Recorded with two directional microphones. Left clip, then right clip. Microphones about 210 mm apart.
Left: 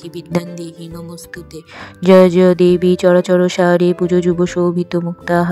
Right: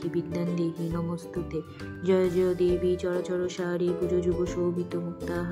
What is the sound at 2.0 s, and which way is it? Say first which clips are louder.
Speech: left 16 dB; 40° left (ahead or behind).